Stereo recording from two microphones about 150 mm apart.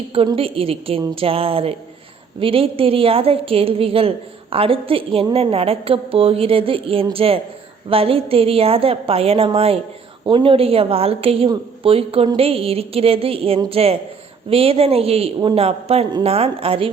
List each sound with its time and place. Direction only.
0.3 s a woman's voice: 40° right (ahead or behind)